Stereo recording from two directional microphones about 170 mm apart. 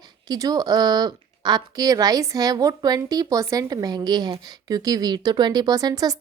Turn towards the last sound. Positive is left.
turn(degrees=-20)  # may be behind; listen again after turning